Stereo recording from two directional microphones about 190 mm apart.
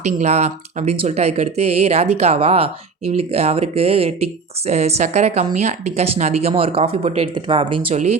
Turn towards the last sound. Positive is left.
turn(degrees=-25)  # may be behind; listen again after turning